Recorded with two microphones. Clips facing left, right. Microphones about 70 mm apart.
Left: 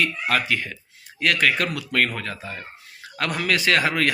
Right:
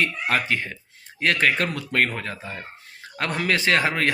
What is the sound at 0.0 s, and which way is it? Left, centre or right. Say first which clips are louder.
A man's voice: even; right.